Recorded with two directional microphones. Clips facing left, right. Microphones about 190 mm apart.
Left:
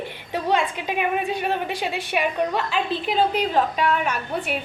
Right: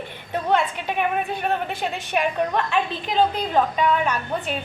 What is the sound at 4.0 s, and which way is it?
Speech, 10° left (ahead or behind).